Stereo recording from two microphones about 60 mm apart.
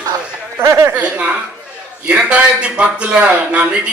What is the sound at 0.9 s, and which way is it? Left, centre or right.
Speech, right.